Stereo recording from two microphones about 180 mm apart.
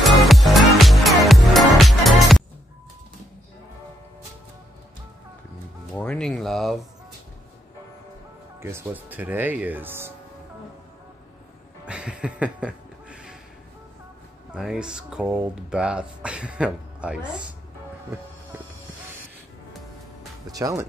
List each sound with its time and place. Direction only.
0.0 s music: centre (ahead or behind)
5.9 s a sound: 5° left (ahead or behind)
8.5 s speech: 15° right (ahead or behind)
11.8 s music: 5° right (ahead or behind)
14.5 s speech: 5° right (ahead or behind)
20.5 s speech: 20° right (ahead or behind)